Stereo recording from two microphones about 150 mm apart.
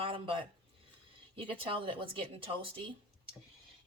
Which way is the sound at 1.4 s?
35° right (ahead or behind).